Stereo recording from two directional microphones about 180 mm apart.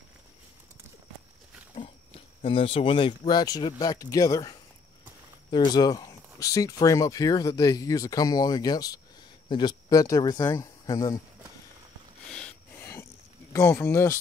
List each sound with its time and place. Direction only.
2.4 s speech: 30° left (ahead or behind)
12.3 s a sound: 5° left (ahead or behind)
13.5 s speech: 15° left (ahead or behind)